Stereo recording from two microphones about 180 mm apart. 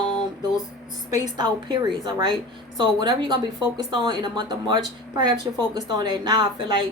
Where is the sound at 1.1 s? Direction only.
25° right (ahead or behind).